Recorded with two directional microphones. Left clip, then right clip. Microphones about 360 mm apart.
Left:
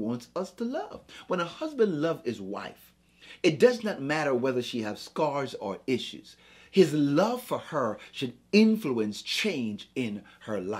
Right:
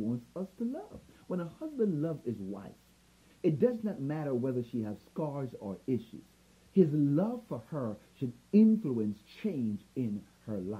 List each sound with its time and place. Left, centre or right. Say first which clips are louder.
0.0 s speech: left 6 dB; centre
5.5 s speech: left 9 dB; centre
5.9 s speech: left 3 dB; centre